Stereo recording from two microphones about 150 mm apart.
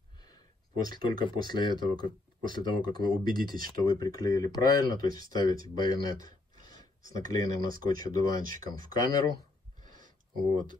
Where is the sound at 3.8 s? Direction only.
25° left (ahead or behind).